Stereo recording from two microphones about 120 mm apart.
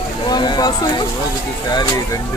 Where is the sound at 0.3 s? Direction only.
35° left (ahead or behind).